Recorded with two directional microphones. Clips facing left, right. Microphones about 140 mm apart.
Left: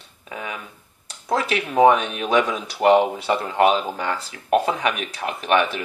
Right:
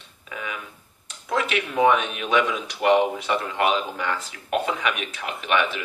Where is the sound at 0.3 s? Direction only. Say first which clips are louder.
Left 2 dB; 30° left (ahead or behind).